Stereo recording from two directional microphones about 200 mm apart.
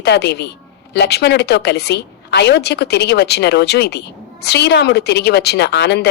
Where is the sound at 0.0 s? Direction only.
55° left (ahead or behind).